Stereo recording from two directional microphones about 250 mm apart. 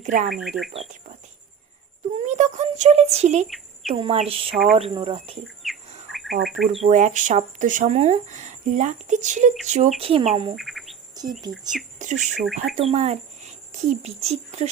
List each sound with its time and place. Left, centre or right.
0.0 s speech: right
0.3 s speech: centre
2.1 s speech: right
4.5 s speech: centre
4.8 s speech: right
5.6 s bird: centre
6.1 s insect: centre
6.8 s speech: right
10.5 s insect: centre
11.2 s bird: centre
11.7 s speech: centre
12.9 s speech: right